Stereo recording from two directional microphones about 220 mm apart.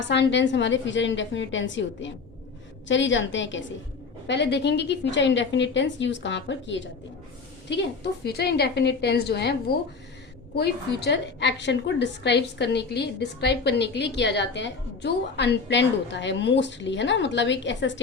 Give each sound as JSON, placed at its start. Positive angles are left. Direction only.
{"t": 0.1, "sound": "a woman's voice", "side_deg": 55}